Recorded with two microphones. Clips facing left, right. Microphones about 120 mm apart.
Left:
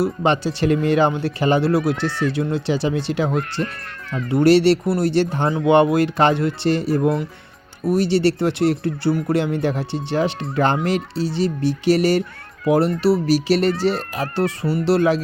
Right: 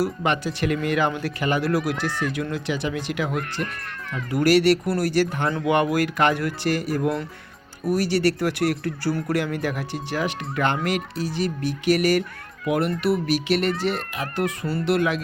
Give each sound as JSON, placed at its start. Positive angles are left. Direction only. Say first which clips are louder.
{"t": 0.0, "sound": "speech", "louder": "left 4 dB", "side_deg": 30}